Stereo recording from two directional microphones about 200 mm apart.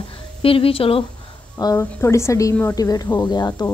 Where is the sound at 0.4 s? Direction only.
25° left (ahead or behind).